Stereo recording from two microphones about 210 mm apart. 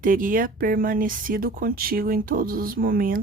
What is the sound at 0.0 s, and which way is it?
A woman's voice, 40° right (ahead or behind).